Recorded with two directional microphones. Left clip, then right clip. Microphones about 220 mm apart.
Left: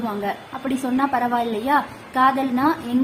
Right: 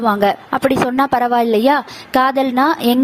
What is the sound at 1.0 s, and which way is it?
A woman's voice, 45° right (ahead or behind).